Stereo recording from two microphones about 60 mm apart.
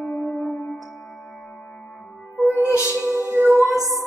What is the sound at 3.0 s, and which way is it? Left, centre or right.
Music, left.